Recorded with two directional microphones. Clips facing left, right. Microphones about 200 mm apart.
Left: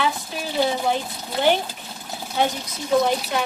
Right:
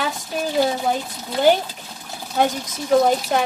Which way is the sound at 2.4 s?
45° right (ahead or behind).